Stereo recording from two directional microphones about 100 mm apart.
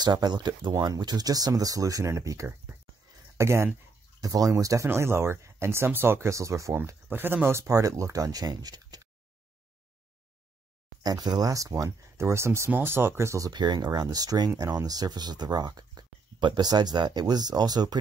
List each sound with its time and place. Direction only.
0.0 s speech: 45° right (ahead or behind); by 3.7 s 25° right (ahead or behind)
4.2 s speech: 35° right (ahead or behind)
7.1 s speech: 20° right (ahead or behind); by 9.1 s 40° right (ahead or behind)
11.0 s speech: 40° right (ahead or behind)
13.5 s speech: 45° right (ahead or behind)